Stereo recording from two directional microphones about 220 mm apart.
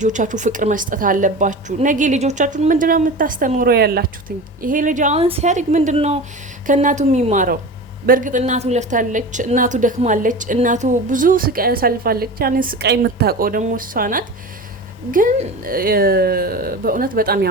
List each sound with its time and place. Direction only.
0.0 s a woman's voice: 35° right (ahead or behind)